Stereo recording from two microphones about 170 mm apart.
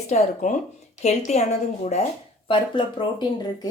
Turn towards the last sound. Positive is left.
turn(degrees=25)  # may be behind; listen again after turning